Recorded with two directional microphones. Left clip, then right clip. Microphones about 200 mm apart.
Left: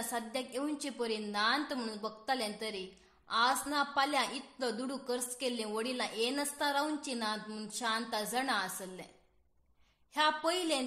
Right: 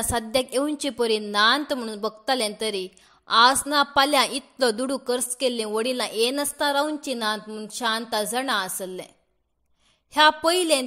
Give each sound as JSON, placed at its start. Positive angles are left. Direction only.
{"t": 0.1, "sound": "a woman's voice", "side_deg": -40}
{"t": 10.1, "sound": "a woman's voice", "side_deg": -40}